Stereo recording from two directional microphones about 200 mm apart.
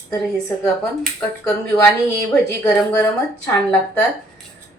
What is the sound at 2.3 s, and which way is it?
Speech, 5° left (ahead or behind).